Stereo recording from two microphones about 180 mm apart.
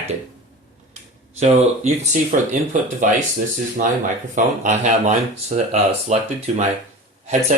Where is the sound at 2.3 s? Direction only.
45° right (ahead or behind).